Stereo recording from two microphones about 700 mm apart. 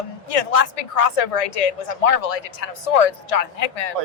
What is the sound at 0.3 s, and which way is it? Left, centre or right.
A woman's voice, left.